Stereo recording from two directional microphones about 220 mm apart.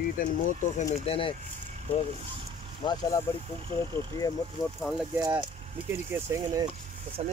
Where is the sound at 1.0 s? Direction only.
25° left (ahead or behind).